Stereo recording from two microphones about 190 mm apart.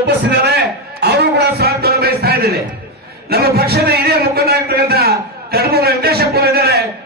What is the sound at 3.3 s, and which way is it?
A man's voice, 55° right (ahead or behind).